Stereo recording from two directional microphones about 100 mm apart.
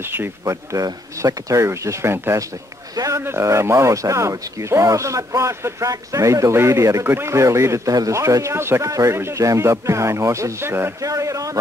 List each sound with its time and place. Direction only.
0.0 s speech: 20° right (ahead or behind)